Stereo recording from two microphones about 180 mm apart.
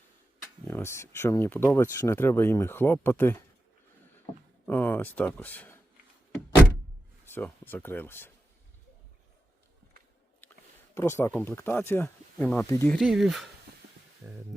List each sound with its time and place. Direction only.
0.7 s speech: 15° left (ahead or behind)
4.6 s speech: 10° left (ahead or behind)
7.3 s speech: 10° left (ahead or behind)
10.9 s speech: 15° left (ahead or behind)
12.9 s speech: centre (ahead or behind)